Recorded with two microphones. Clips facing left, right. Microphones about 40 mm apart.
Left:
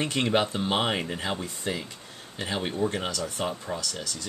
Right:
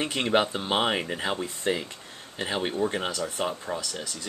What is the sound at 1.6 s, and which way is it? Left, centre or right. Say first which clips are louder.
Speech: right 4 dB; right.